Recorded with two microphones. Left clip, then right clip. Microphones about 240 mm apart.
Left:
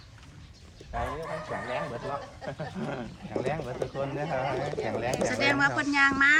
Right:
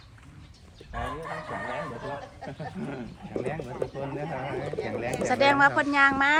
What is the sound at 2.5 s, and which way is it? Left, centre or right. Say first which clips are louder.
Speech: left 2 dB; left.